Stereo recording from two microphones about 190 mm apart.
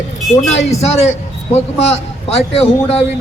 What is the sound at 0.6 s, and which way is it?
A man's voice, 35° left (ahead or behind).